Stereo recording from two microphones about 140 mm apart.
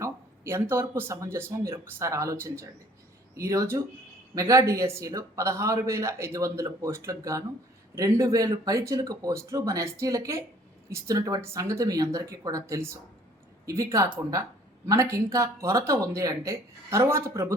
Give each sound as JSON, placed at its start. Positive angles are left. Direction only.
{"t": 0.0, "sound": "a man's voice", "side_deg": -20}